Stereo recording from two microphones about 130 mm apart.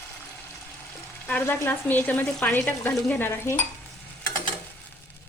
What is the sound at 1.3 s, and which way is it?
Speech, 15° left (ahead or behind).